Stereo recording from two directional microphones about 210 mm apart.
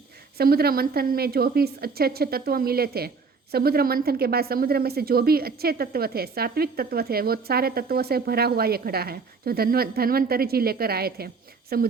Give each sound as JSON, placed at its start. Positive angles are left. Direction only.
{"t": 0.3, "sound": "a woman's voice", "side_deg": -50}